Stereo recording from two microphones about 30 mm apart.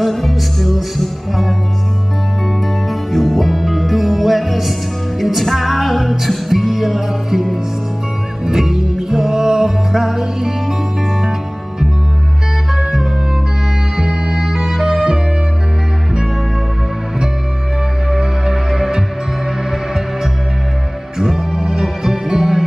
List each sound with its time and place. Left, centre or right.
0.0 s music: centre
8.5 s music: centre
12.7 s music: centre
18.1 s music: centre
21.2 s music: centre